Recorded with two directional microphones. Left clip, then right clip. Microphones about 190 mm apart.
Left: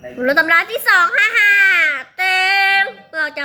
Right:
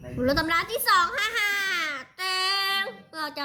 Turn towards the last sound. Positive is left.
turn(degrees=-20)  # may be behind; listen again after turning